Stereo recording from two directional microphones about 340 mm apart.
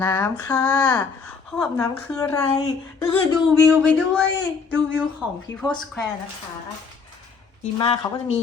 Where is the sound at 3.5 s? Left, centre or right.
Centre.